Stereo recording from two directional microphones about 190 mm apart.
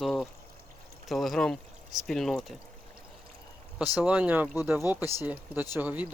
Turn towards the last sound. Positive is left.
turn(degrees=-10)  # may be behind; listen again after turning